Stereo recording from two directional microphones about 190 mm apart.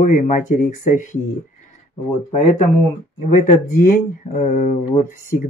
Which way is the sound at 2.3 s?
40° left (ahead or behind).